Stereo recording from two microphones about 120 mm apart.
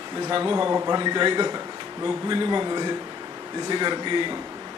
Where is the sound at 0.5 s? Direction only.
30° right (ahead or behind).